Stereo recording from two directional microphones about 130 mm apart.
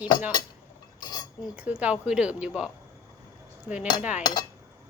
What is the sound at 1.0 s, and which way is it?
Chink, 30° left (ahead or behind).